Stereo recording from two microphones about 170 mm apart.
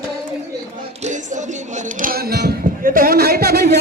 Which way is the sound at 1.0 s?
45° right (ahead or behind).